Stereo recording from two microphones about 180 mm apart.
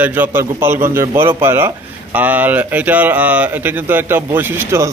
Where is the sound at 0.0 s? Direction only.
10° right (ahead or behind).